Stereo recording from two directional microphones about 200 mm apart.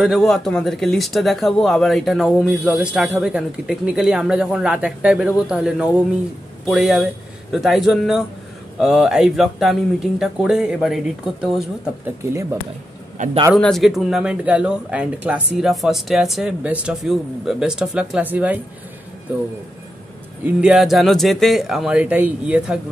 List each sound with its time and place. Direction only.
0.0 s speech: centre (ahead or behind)
12.3 s speech: 15° right (ahead or behind)
13.2 s a man's voice: 40° right (ahead or behind)
13.6 s speech: centre (ahead or behind)
20.4 s speech: 5° right (ahead or behind)